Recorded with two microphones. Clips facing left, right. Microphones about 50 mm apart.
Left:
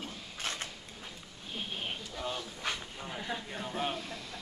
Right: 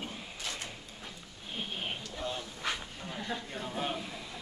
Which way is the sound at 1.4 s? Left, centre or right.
Centre.